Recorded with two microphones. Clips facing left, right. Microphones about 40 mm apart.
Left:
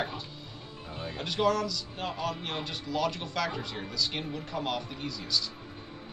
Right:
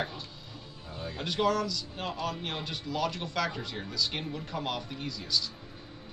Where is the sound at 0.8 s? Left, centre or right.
Left.